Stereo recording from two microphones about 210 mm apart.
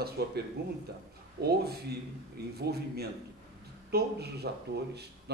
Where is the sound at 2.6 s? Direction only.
50° right (ahead or behind).